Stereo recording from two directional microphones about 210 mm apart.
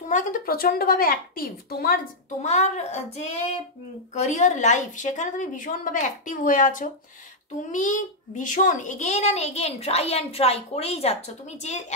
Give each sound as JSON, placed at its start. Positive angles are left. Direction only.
{"t": 0.1, "sound": "a woman's voice", "side_deg": 40}
{"t": 2.4, "sound": "a child's voice", "side_deg": 35}